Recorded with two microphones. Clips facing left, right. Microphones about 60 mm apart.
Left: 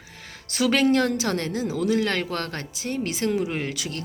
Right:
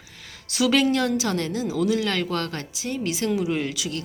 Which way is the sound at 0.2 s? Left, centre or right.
Left.